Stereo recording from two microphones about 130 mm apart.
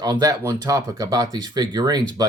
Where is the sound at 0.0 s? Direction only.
30° right (ahead or behind).